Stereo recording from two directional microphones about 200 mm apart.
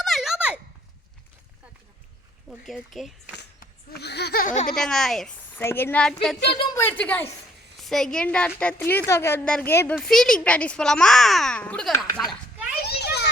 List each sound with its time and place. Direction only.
0.0 s a sound: centre (ahead or behind)
2.5 s a child's voice: centre (ahead or behind)
3.3 s speech: 55° left (ahead or behind); by 4.7 s 40° left (ahead or behind)
4.7 s a child's voice: 5° left (ahead or behind)
12.8 s children playing: 55° left (ahead or behind)